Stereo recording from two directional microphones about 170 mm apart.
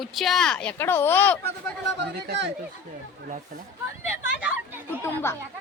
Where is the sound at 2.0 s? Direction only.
90° right.